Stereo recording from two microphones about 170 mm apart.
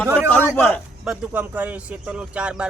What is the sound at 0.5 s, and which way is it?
Speech, 10° left (ahead or behind).